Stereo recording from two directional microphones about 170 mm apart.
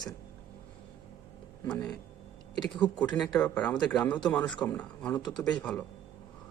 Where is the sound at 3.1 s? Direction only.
5° left (ahead or behind).